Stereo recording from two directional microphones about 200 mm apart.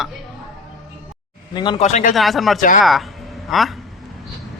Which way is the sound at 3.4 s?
Centre (ahead or behind).